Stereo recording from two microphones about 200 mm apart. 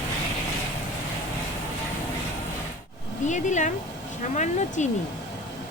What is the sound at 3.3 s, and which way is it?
Speech, 35° left (ahead or behind).